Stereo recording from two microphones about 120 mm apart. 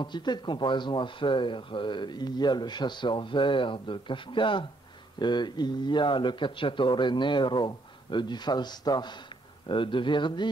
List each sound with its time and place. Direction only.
0.0 s speech: 40° left (ahead or behind)